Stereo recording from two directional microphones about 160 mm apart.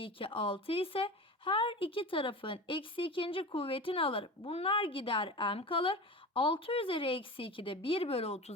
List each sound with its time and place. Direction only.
0.0 s speech: 35° left (ahead or behind)